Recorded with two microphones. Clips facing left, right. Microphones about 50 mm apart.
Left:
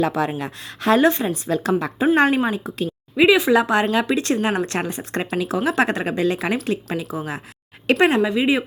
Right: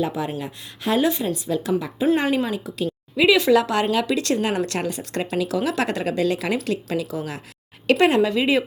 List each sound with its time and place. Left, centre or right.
0.0 s a woman's voice: left
2.4 s a woman's voice: left
3.2 s a woman's voice: left